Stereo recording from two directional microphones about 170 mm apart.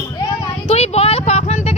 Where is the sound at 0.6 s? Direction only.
40° left (ahead or behind).